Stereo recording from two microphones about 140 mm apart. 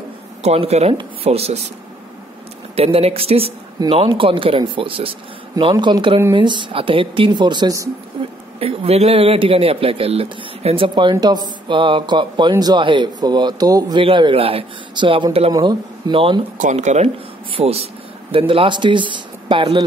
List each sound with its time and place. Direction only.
0.4 s a woman's voice: 50° right (ahead or behind)
2.7 s a woman's voice: 45° right (ahead or behind); by 7.9 s 25° right (ahead or behind)
8.5 s a man's voice: 45° right (ahead or behind)
16.5 s a woman's voice: 60° right (ahead or behind); by 19.8 s 35° right (ahead or behind)